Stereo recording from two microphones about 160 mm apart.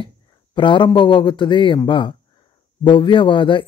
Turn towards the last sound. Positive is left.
turn(degrees=30)  # may be behind; listen again after turning